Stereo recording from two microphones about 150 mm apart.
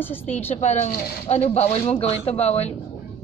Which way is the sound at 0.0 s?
15° left (ahead or behind).